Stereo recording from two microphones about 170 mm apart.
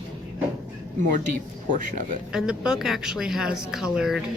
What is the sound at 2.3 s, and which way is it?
A man's voice, 5° right (ahead or behind).